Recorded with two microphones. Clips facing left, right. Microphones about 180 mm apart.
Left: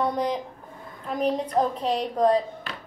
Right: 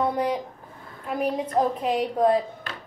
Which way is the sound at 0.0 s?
5° right (ahead or behind).